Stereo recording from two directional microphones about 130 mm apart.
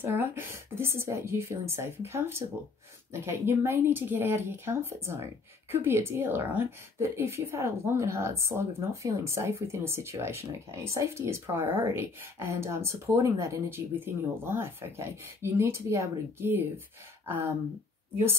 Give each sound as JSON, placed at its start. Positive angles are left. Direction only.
{"t": 0.0, "sound": "speech", "side_deg": -20}